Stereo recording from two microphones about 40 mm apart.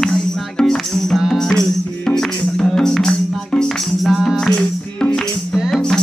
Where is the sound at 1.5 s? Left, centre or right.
Centre.